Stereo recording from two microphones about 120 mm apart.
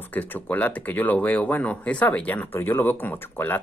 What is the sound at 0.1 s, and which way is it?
Speech, 15° left (ahead or behind).